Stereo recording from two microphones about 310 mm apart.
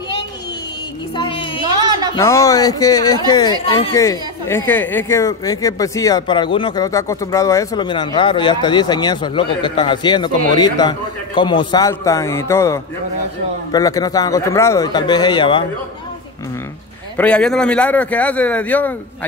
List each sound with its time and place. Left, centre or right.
1.1 s a sound: centre
2.1 s speech: centre
17.2 s speech: centre